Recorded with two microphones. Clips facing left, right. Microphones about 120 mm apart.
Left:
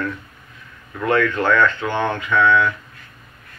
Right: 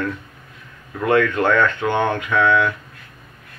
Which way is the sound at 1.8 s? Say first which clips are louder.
Right 2 dB; 55° right (ahead or behind).